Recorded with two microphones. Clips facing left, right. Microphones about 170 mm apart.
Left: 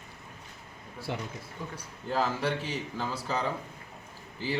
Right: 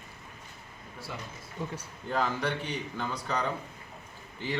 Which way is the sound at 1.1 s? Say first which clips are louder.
Left 6 dB; 70° left (ahead or behind).